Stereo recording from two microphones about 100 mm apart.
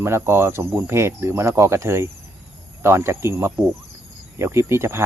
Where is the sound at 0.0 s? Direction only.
25° right (ahead or behind).